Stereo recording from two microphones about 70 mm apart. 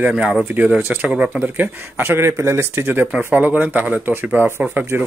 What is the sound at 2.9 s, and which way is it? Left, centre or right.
Speech, right.